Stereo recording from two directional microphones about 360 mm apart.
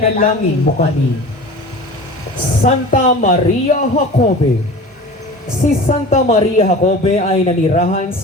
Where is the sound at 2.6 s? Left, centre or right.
Left.